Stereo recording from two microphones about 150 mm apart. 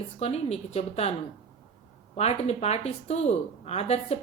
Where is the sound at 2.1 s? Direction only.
45° left (ahead or behind).